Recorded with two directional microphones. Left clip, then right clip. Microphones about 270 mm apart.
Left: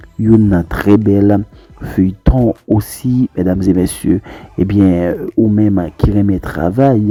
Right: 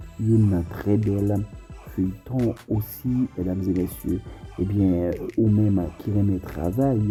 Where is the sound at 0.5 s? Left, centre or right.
Left.